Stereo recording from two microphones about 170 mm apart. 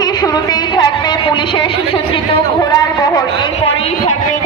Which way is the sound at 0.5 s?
25° left (ahead or behind).